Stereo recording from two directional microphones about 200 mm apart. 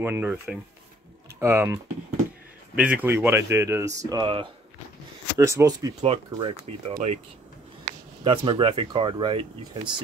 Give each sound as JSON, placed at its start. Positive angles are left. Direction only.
{"t": 0.0, "sound": "speech", "side_deg": -10}
{"t": 5.9, "sound": "speech", "side_deg": -25}
{"t": 8.2, "sound": "speech", "side_deg": -25}